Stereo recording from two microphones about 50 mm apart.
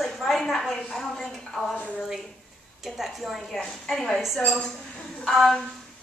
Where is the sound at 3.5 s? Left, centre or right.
Centre.